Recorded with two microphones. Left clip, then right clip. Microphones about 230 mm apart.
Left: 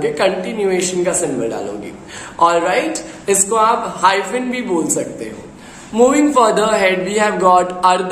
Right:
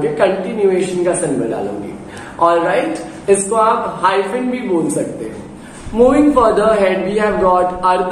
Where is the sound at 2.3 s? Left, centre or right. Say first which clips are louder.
Even; left.